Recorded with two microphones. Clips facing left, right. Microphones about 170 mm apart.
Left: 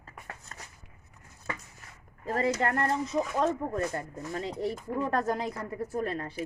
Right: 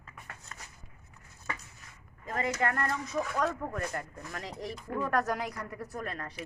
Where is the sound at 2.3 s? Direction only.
35° left (ahead or behind).